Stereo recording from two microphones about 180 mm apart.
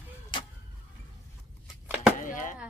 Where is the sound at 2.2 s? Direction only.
45° left (ahead or behind).